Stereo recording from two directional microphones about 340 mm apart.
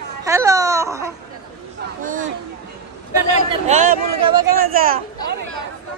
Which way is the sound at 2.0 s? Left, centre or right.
Right.